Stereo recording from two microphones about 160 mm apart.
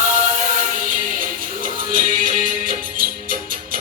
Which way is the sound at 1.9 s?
60° right (ahead or behind).